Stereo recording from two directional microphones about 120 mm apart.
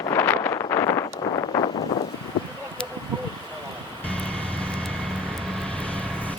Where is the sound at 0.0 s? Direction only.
20° left (ahead or behind).